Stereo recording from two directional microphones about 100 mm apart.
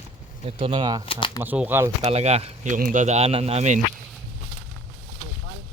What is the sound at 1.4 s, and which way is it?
Speech, 15° right (ahead or behind).